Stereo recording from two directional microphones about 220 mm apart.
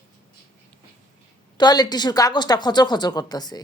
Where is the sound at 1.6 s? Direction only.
20° left (ahead or behind).